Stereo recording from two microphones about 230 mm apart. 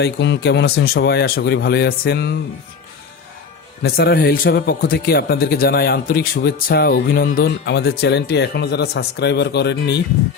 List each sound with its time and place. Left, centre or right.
0.0 s speech: left
3.8 s speech: left